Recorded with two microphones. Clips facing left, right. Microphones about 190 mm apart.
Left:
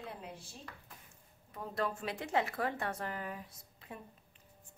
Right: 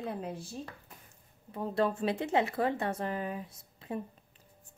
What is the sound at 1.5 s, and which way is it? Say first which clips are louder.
Speech: right 7 dB; 30° right (ahead or behind).